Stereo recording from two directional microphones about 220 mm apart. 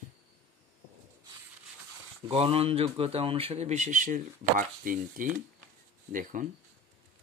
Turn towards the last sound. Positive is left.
turn(degrees=-40)  # may be behind; listen again after turning